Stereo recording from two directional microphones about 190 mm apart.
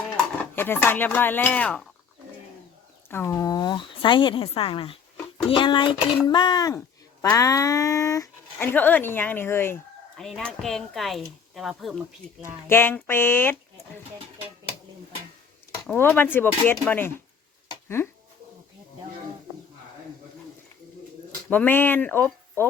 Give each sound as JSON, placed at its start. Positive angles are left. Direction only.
{"t": 0.5, "sound": "speech", "side_deg": 10}
{"t": 3.1, "sound": "speech", "side_deg": 10}
{"t": 10.2, "sound": "speech", "side_deg": 0}
{"t": 12.6, "sound": "speech", "side_deg": 10}
{"t": 15.9, "sound": "speech", "side_deg": 10}
{"t": 21.5, "sound": "speech", "side_deg": 10}